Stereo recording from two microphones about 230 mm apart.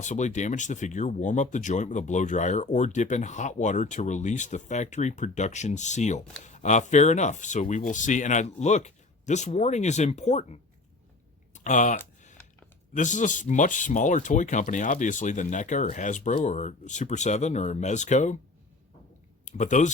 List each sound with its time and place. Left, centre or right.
0.0 s speech: left
13.0 s speech: left
19.5 s speech: left